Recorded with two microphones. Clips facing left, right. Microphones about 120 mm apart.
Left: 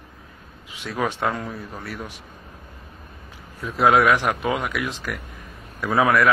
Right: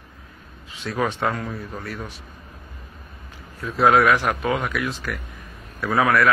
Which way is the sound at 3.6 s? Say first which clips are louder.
Even; 15° left (ahead or behind).